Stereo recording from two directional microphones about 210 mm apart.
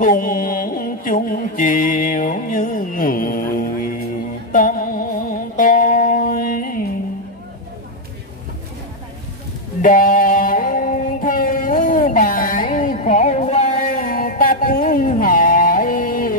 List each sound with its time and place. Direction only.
0.0 s mantra: 40° left (ahead or behind)
4.5 s music: 40° left (ahead or behind)
9.8 s music: 40° left (ahead or behind)